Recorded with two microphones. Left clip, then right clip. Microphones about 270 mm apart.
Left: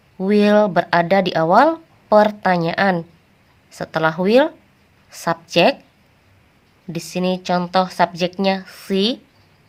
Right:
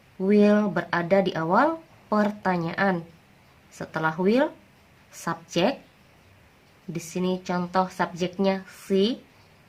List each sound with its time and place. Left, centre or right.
0.2 s speech: left
6.9 s speech: left